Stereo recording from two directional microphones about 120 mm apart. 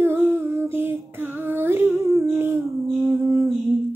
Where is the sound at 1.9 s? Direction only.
25° right (ahead or behind).